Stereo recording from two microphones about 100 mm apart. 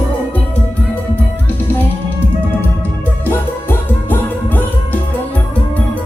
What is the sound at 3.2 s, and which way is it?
Music, 20° left (ahead or behind).